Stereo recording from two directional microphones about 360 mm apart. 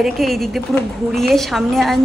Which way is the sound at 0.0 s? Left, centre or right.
Centre.